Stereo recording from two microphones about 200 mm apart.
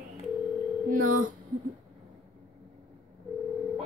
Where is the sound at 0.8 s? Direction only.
45° right (ahead or behind).